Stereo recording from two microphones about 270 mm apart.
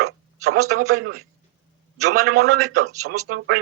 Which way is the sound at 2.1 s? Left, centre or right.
Right.